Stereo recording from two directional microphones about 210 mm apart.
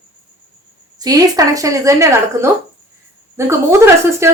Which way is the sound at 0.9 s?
15° right (ahead or behind).